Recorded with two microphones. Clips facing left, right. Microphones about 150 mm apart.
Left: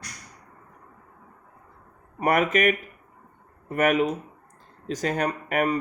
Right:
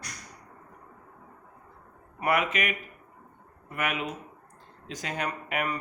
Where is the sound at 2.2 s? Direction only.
45° left (ahead or behind).